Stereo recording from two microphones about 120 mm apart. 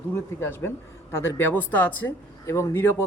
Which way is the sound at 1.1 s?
20° left (ahead or behind).